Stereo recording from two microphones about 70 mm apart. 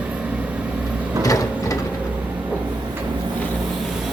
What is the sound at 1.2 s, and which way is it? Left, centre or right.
Printer, left.